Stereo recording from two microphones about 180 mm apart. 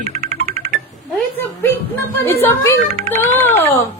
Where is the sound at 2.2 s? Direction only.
15° left (ahead or behind).